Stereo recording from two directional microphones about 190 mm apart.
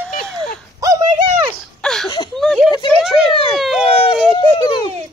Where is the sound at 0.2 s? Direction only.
5° left (ahead or behind).